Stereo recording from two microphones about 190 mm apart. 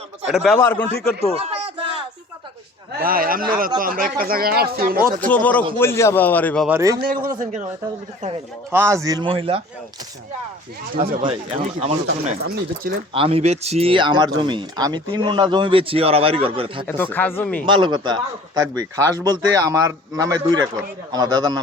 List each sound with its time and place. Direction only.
0.3 s a man's voice: 5° right (ahead or behind)
0.6 s speech: 10° left (ahead or behind)
1.4 s a sound: 30° right (ahead or behind)
3.0 s speech: 50° right (ahead or behind)
5.2 s speech: 10° left (ahead or behind)
6.7 s a man's voice: 15° right (ahead or behind)
7.0 s speech: 50° right (ahead or behind)
8.7 s speech: 15° right (ahead or behind)
11.3 s speech: 35° right (ahead or behind)
12.5 s speech: 50° right (ahead or behind)
13.1 s speech: 30° right (ahead or behind)
16.8 s speech: 10° left (ahead or behind)
17.7 s speech: 25° right (ahead or behind)